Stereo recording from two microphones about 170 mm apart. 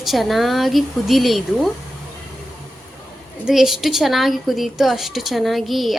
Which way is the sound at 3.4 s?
Centre (ahead or behind).